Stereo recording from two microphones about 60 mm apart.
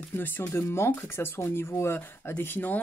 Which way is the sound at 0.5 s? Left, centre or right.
Left.